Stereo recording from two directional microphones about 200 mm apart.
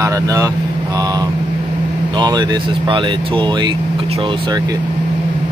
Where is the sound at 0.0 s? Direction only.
15° right (ahead or behind).